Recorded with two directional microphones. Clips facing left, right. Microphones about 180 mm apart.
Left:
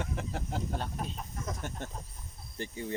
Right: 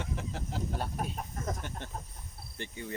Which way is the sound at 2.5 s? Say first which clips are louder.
Left 3 dB; 35° left (ahead or behind).